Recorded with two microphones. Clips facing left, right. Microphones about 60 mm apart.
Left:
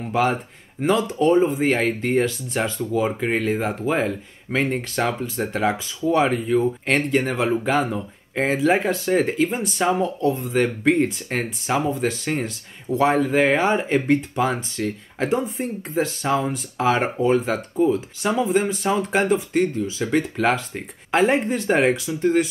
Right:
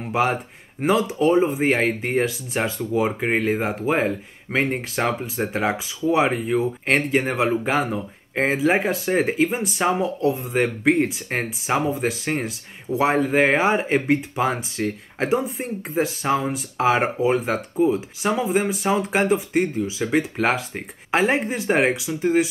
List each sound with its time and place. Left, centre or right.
0.1 s speech: centre
4.6 s speech: centre